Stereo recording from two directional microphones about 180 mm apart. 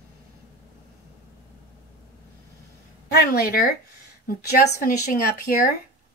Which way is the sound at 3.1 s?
60° left (ahead or behind).